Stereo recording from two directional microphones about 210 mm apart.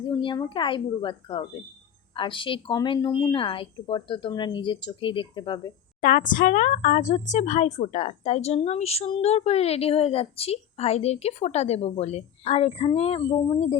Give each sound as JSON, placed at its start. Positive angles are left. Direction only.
{"t": 0.1, "sound": "a woman's voice", "side_deg": 25}
{"t": 6.0, "sound": "a woman's voice", "side_deg": 40}